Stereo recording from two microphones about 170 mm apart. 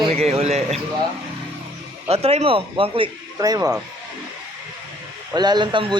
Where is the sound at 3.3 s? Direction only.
20° right (ahead or behind).